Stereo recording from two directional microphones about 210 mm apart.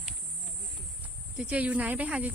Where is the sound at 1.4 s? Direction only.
5° right (ahead or behind).